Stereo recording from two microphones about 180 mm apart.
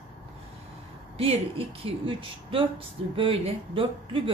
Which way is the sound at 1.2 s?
30° right (ahead or behind).